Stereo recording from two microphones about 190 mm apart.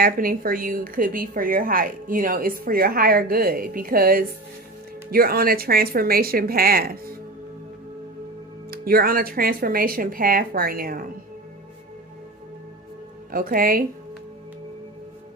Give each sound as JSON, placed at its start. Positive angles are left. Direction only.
{"t": 0.0, "sound": "a woman's voice", "side_deg": -50}
{"t": 8.7, "sound": "a woman's voice", "side_deg": -50}
{"t": 13.3, "sound": "a woman's voice", "side_deg": -50}